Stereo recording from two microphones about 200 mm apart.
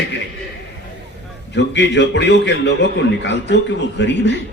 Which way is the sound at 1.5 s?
60° left (ahead or behind).